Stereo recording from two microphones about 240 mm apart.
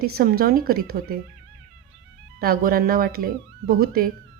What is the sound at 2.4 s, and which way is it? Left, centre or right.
Speech, right.